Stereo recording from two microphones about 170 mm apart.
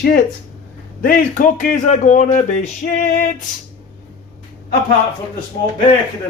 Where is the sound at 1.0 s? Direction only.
50° left (ahead or behind).